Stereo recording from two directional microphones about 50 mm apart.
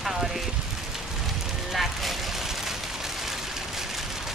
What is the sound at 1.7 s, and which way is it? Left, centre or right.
Vehicle, centre.